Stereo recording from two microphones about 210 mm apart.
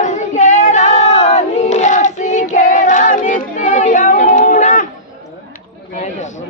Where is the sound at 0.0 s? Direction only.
35° left (ahead or behind).